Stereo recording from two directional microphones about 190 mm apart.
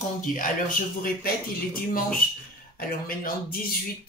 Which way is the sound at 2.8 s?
50° left (ahead or behind).